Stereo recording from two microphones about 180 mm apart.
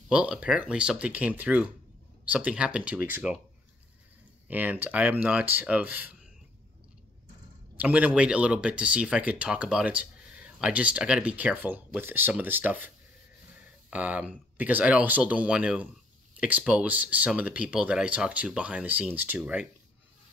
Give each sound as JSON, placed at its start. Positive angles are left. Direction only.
{"t": 0.1, "sound": "speech", "side_deg": -5}
{"t": 4.5, "sound": "speech", "side_deg": -10}
{"t": 7.7, "sound": "speech", "side_deg": -10}